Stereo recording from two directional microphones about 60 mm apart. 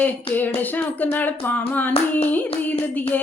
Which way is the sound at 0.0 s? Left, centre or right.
Left.